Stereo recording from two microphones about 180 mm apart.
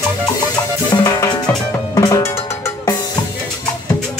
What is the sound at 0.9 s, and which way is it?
Music, 20° left (ahead or behind).